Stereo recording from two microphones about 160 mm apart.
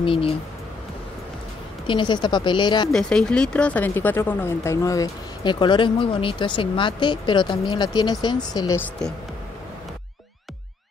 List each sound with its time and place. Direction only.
0.0 s speech: 35° left (ahead or behind)
1.9 s speech: 30° left (ahead or behind)
2.9 s speech: 5° left (ahead or behind); by 8.7 s 25° left (ahead or behind)